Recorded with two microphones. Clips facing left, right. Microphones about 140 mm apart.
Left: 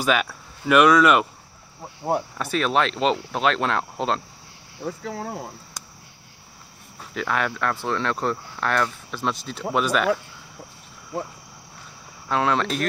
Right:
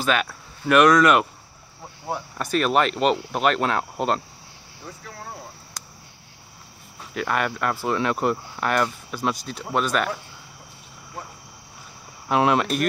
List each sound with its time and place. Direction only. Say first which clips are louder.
0.0 s speech: left 1 dB; 5° left (ahead or behind)
2.3 s speech: right 6 dB; centre (ahead or behind)
4.8 s speech: left 9 dB; 90° left
7.0 s speech: right 1 dB; 5° right (ahead or behind)
12.3 s speech: right 3 dB; 15° right (ahead or behind)